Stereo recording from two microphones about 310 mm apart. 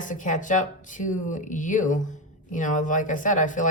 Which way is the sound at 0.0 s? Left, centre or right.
Left.